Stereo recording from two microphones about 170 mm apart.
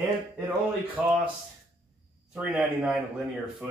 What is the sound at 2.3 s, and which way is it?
Speech, 5° right (ahead or behind).